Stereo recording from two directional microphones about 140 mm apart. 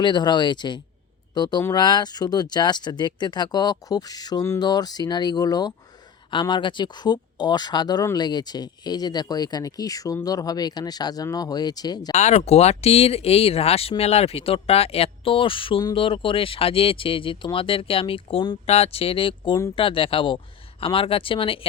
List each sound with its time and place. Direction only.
0.0 s speech: 35° left (ahead or behind)
12.1 s speech: 50° left (ahead or behind)